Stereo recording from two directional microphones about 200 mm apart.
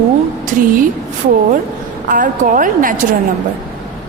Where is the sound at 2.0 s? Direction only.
40° right (ahead or behind).